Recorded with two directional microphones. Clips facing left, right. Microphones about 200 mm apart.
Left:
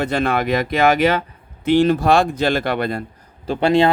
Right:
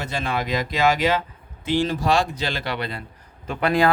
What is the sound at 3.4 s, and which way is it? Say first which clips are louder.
Speech: left 5 dB; 25° left (ahead or behind).